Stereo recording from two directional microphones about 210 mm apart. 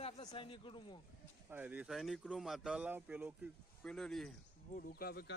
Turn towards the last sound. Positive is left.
turn(degrees=45)  # may be behind; listen again after turning